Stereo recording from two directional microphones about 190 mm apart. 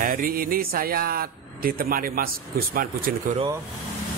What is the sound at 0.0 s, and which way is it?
Mantra, 50° right (ahead or behind).